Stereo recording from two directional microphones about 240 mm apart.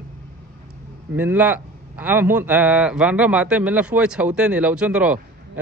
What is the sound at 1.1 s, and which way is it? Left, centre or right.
A man's voice, centre.